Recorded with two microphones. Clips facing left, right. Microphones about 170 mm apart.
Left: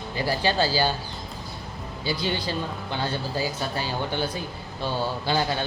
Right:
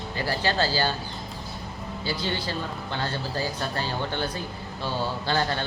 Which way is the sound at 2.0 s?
15° left (ahead or behind).